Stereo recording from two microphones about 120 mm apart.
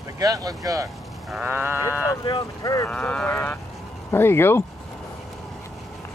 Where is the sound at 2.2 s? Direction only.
40° left (ahead or behind).